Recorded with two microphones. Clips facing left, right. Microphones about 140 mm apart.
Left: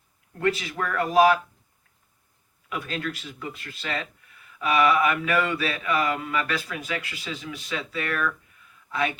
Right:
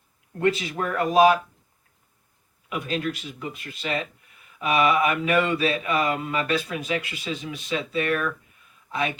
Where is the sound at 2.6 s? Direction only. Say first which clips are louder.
Right 3 dB; 20° right (ahead or behind).